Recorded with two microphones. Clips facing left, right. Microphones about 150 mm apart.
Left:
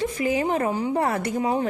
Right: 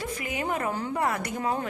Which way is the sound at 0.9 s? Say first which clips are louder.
Left 4 dB; 30° left (ahead or behind).